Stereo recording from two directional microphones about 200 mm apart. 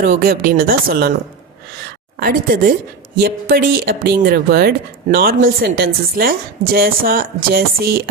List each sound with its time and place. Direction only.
0.0 s speech: 45° right (ahead or behind)
2.1 s speech: 45° right (ahead or behind)